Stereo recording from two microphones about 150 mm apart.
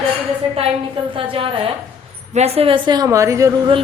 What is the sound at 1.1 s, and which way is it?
A woman's voice, 35° right (ahead or behind).